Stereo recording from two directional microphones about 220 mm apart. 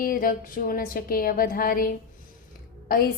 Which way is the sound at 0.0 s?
40° left (ahead or behind).